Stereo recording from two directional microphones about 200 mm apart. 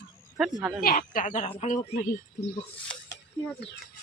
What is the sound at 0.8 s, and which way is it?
Speech, 45° left (ahead or behind).